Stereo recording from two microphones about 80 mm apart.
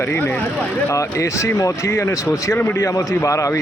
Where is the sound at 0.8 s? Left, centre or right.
Left.